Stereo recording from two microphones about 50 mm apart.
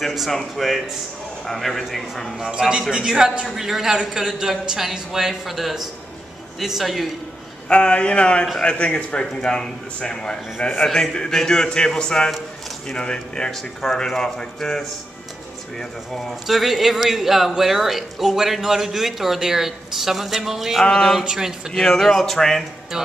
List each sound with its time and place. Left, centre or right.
0.0 s speech: centre
7.6 s speech: left
16.4 s speech: centre
20.8 s speech: centre
21.2 s speech: centre
21.7 s speech: centre
22.9 s speech: centre